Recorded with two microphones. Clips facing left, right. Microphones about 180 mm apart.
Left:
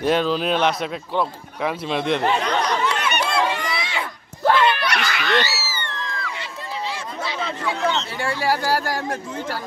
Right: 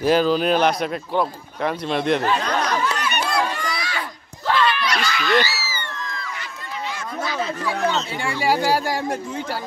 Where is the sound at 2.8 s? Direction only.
25° left (ahead or behind).